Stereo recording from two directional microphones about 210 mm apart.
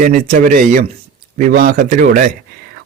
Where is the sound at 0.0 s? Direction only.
40° right (ahead or behind).